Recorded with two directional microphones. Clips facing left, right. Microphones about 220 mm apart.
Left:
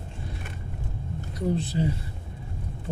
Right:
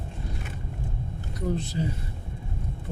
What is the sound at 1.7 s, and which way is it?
Speech, 30° left (ahead or behind).